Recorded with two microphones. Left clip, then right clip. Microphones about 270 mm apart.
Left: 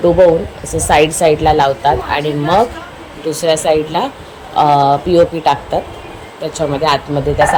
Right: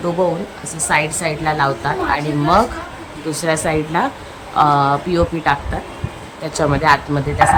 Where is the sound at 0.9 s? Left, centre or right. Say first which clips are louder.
Left 8 dB; centre.